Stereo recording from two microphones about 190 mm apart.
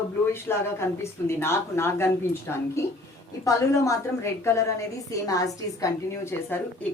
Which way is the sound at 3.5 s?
15° left (ahead or behind).